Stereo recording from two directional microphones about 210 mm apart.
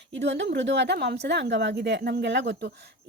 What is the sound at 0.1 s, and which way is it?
A woman's voice, 55° right (ahead or behind).